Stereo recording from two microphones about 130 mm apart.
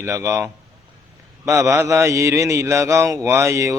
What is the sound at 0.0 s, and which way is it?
Mantra, 20° right (ahead or behind).